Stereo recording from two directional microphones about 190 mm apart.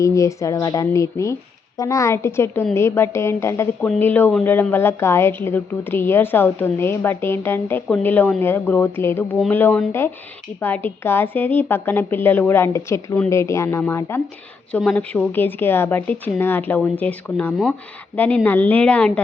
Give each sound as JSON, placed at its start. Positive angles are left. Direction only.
{"t": 0.0, "sound": "a woman's voice", "side_deg": 15}